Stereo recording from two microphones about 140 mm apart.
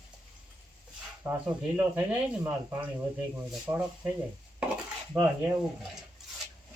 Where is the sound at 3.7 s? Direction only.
5° right (ahead or behind).